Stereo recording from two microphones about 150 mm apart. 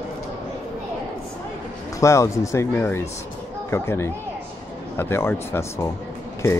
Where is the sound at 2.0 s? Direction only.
20° left (ahead or behind).